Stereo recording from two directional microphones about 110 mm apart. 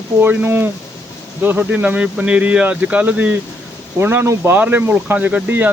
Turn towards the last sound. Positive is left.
turn(degrees=-15)  # may be behind; listen again after turning